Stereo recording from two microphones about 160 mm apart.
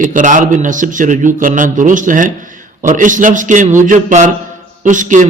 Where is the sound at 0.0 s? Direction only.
55° right (ahead or behind).